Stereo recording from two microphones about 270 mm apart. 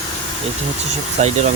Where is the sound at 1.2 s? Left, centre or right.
Right.